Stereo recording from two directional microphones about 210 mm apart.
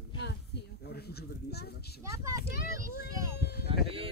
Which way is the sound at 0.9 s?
50° left (ahead or behind).